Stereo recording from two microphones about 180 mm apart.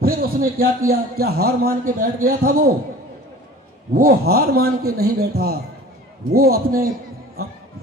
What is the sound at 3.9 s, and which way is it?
A man's voice, 55° right (ahead or behind).